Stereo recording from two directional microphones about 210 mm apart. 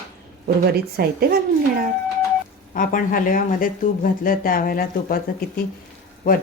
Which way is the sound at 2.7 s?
40° left (ahead or behind).